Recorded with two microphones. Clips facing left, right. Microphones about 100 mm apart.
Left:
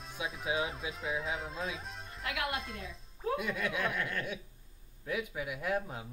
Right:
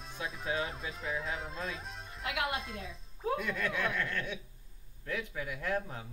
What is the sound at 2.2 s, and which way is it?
Speech, 30° right (ahead or behind).